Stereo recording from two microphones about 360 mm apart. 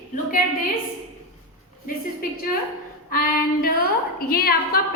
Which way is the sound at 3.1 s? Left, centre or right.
Left.